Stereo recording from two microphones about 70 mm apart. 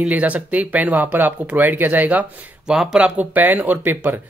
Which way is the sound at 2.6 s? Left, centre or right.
Centre.